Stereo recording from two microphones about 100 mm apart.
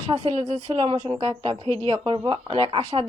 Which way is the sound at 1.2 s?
60° right (ahead or behind).